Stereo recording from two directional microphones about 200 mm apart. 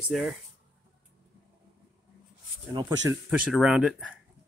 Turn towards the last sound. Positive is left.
turn(degrees=-5)  # may be behind; listen again after turning